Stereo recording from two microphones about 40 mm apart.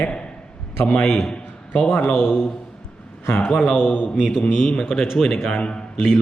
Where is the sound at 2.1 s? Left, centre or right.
Left.